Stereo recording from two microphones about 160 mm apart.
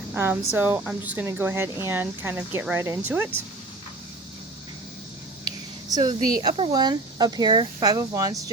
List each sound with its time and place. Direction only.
0.1 s speech: 15° right (ahead or behind)
5.5 s a sound: 25° right (ahead or behind)
6.5 s speech: 40° right (ahead or behind)
6.7 s speech: 25° right (ahead or behind)